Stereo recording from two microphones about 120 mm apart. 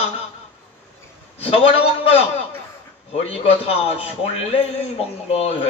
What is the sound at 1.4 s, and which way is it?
Speech, 55° left (ahead or behind).